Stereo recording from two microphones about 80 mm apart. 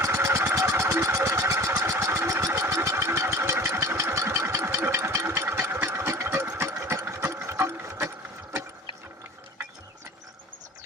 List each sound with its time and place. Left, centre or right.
0.0 s vehicle: right
6.6 s sewing machine: right